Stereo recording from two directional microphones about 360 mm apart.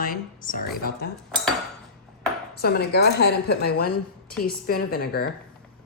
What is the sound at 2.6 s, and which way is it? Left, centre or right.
Speech, left.